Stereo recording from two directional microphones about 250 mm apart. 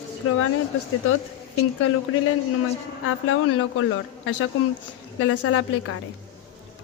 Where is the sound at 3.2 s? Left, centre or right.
Left.